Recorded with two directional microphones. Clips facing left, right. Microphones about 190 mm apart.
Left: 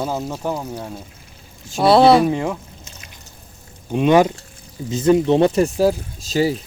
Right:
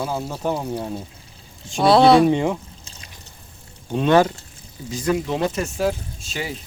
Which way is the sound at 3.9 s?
15° left (ahead or behind).